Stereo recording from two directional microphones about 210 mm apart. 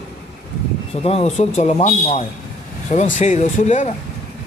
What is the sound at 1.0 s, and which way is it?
A man's voice, 30° left (ahead or behind).